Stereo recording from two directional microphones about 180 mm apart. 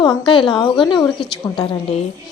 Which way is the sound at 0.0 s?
25° left (ahead or behind).